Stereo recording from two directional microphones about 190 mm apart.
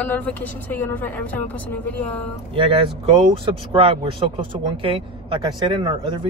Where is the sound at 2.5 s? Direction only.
25° right (ahead or behind).